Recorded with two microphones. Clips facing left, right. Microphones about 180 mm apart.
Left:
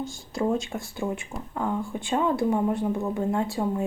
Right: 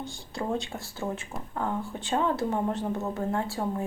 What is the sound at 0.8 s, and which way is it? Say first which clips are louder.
Speech: left 3 dB; 15° left (ahead or behind).